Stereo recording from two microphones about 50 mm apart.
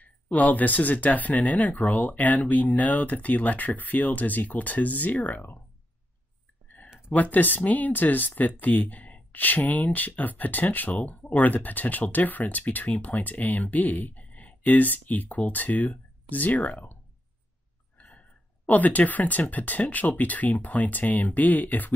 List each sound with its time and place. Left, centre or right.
0.0 s speech: left
7.2 s speech: left
18.7 s speech: left